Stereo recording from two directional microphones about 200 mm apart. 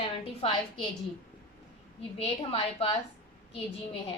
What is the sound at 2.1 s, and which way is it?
Speech, 25° left (ahead or behind).